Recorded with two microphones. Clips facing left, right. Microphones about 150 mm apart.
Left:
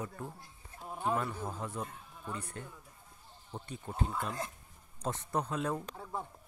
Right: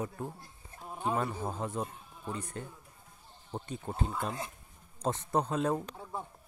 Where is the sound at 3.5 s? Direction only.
30° right (ahead or behind).